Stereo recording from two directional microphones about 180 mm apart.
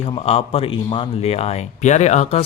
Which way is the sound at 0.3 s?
30° left (ahead or behind).